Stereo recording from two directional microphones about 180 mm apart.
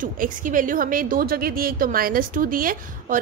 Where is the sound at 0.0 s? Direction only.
50° right (ahead or behind).